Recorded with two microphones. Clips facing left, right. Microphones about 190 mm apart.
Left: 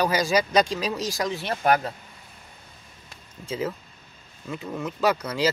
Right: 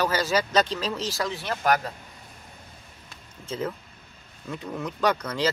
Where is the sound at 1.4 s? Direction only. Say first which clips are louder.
Left 2 dB; 25° left (ahead or behind).